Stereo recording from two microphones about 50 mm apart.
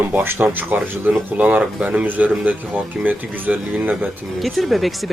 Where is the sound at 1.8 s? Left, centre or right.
Right.